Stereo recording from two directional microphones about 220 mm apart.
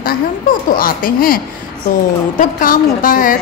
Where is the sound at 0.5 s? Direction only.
40° left (ahead or behind).